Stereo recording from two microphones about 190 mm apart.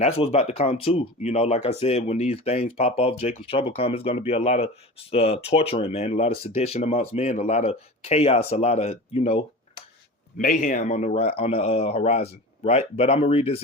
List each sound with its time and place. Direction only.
0.0 s speech: 30° left (ahead or behind)
10.3 s speech: 45° left (ahead or behind)